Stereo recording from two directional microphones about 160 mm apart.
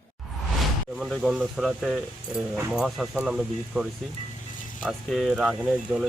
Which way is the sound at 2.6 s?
10° right (ahead or behind).